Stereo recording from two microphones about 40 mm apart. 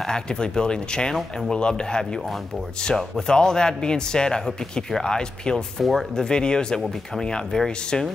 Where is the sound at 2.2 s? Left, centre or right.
Centre.